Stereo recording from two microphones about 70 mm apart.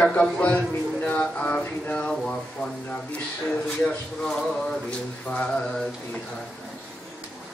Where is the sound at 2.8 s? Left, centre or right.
Centre.